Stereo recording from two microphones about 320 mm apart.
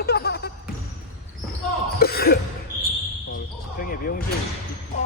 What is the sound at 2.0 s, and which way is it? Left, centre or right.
Speech, left.